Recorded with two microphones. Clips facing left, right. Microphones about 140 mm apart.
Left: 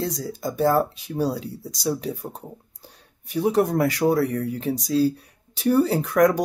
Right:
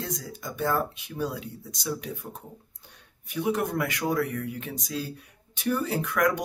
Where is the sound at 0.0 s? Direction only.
35° left (ahead or behind).